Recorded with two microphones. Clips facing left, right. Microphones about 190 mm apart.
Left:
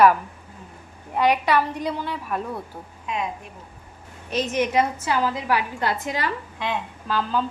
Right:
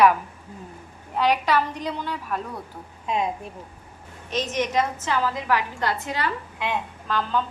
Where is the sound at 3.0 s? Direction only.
35° right (ahead or behind).